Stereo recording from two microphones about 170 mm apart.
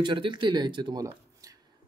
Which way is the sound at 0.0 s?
30° right (ahead or behind).